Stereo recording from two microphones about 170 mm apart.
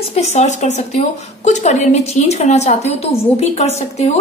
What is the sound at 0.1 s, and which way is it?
A woman's voice, 40° left (ahead or behind).